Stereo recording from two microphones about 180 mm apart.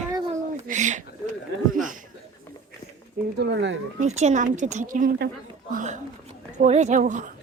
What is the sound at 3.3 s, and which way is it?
Speech, 70° right (ahead or behind).